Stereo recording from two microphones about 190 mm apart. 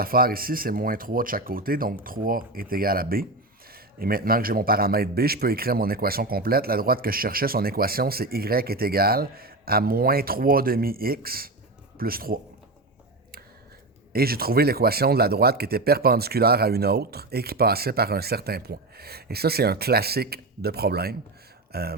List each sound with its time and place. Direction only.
0.0 s a man's voice: 50° right (ahead or behind)
14.1 s speech: 55° right (ahead or behind)